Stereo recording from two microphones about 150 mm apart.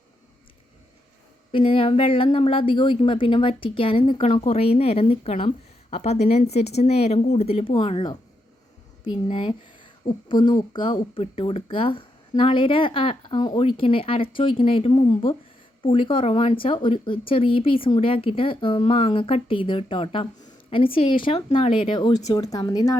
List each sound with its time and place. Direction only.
1.5 s a woman's voice: 35° left (ahead or behind)